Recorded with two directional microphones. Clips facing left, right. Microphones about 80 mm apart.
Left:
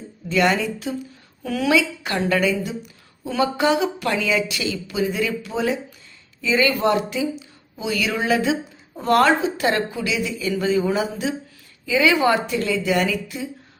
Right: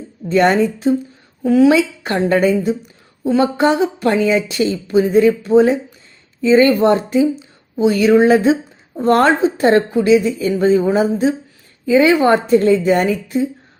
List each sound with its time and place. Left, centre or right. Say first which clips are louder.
0.3 s speech: right 6 dB; right